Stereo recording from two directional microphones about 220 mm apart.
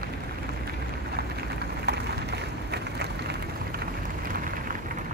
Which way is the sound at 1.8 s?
50° right (ahead or behind).